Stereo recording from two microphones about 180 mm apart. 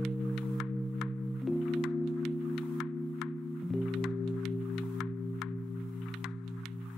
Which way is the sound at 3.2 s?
Centre (ahead or behind).